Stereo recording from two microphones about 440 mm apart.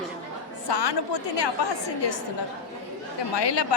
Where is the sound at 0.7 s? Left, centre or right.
Left.